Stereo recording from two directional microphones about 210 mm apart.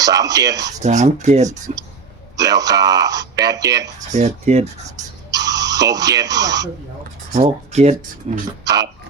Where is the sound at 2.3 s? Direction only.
15° right (ahead or behind).